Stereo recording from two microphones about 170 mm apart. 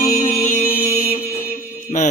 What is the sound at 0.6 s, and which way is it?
Music, 60° left (ahead or behind).